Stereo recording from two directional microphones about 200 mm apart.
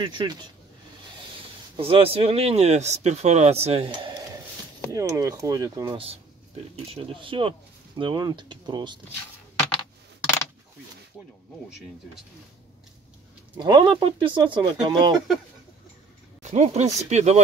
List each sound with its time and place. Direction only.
0.0 s speech: 20° right (ahead or behind)
1.8 s speech: 30° right (ahead or behind)
4.9 s speech: 15° right (ahead or behind)
13.6 s speech: 20° right (ahead or behind)
16.4 s speech: 35° right (ahead or behind)